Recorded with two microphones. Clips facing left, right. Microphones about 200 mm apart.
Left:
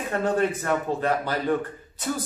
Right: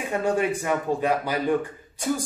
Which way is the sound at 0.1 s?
10° right (ahead or behind).